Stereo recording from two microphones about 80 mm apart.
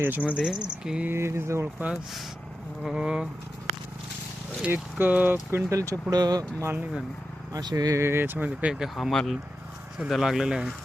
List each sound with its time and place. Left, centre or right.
0.0 s speech: right
0.3 s speech: centre
1.0 s speech: right
2.8 s speech: centre
4.7 s speech: right
6.1 s speech: right
6.6 s speech: right
7.5 s speech: right
7.9 s speech: right
8.7 s speech: centre